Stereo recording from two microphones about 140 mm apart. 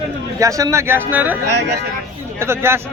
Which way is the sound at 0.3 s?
20° right (ahead or behind).